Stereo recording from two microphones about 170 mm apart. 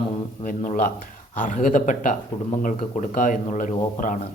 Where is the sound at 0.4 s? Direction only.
50° left (ahead or behind).